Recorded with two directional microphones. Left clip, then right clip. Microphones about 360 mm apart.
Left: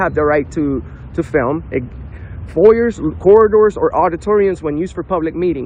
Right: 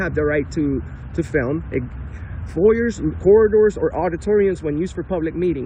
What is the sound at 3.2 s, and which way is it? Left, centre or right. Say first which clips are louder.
Speech: left 4 dB; left.